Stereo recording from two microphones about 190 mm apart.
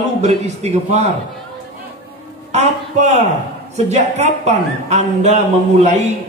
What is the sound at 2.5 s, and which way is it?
A man's voice, 35° right (ahead or behind).